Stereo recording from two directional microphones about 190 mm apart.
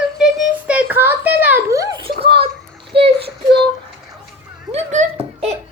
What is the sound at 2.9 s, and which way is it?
Child singing, 30° right (ahead or behind).